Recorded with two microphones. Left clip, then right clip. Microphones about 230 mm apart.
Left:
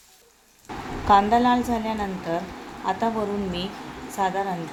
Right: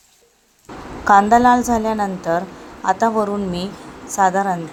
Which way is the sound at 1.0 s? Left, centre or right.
Right.